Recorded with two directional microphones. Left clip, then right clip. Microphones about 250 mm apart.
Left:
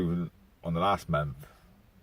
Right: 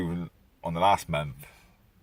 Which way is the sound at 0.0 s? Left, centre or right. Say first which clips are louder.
Left 1 dB; centre.